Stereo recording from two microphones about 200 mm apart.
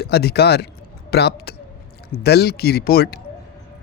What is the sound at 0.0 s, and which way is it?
Speech, 55° left (ahead or behind).